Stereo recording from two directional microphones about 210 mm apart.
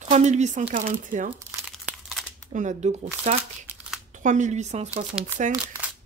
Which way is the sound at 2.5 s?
35° right (ahead or behind).